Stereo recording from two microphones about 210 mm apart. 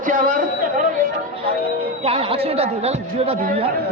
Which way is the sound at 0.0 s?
40° right (ahead or behind).